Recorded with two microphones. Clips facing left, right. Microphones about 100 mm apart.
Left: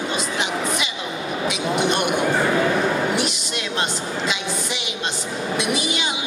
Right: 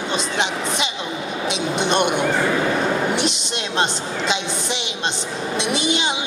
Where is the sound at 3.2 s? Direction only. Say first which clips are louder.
Right 1 dB; 25° right (ahead or behind).